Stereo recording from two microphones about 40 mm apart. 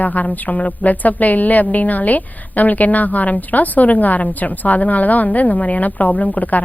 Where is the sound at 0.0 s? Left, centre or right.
Left.